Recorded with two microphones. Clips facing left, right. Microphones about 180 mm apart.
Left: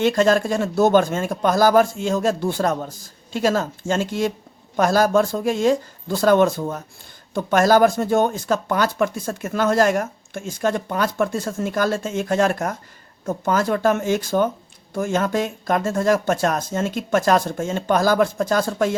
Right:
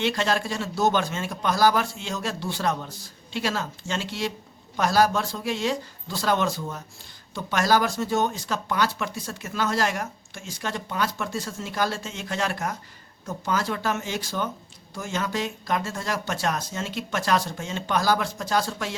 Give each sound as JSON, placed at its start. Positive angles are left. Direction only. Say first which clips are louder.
{"t": 0.0, "sound": "speech", "louder": "left 8 dB", "side_deg": 45}